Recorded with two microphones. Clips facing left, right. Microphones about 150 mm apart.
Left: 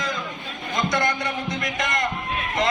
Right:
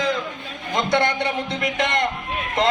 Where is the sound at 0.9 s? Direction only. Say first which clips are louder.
Right 6 dB; 65° right (ahead or behind).